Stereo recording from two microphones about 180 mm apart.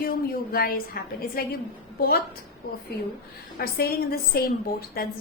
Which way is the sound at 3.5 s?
55° left (ahead or behind).